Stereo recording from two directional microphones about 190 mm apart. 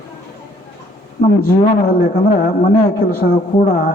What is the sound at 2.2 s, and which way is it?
Speech, 45° left (ahead or behind).